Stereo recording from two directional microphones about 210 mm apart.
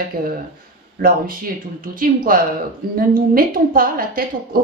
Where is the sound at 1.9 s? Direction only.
40° right (ahead or behind).